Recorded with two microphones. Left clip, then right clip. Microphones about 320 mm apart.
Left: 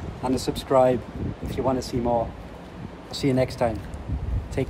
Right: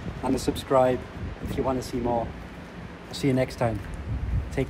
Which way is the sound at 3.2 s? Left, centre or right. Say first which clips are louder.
Left 2 dB; centre.